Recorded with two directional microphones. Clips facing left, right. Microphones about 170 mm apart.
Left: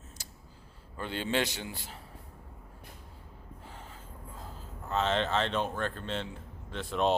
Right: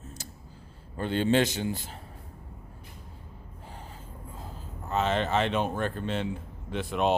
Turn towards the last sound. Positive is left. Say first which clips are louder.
# right 2 dB
turn(degrees=-5)  # may be behind; listen again after turning